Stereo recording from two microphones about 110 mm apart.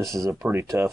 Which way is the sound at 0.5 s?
30° right (ahead or behind).